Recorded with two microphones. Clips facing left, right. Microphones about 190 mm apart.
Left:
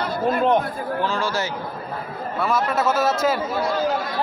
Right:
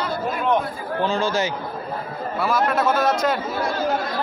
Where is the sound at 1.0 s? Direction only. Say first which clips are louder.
Right 4 dB; 20° right (ahead or behind).